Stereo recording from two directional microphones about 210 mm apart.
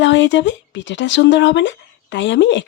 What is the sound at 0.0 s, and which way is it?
Speech, 60° left (ahead or behind).